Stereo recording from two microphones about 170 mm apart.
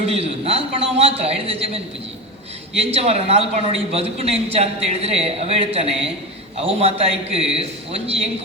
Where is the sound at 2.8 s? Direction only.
35° right (ahead or behind).